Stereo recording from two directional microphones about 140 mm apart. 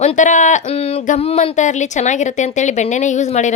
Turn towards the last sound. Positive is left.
turn(degrees=55)  # may be behind; listen again after turning